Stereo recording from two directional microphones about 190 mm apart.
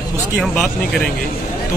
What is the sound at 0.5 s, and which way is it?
Speech, 5° left (ahead or behind).